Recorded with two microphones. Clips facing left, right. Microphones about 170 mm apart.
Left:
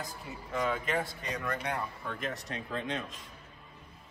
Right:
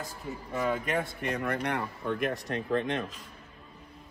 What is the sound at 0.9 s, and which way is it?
Speech, 55° right (ahead or behind).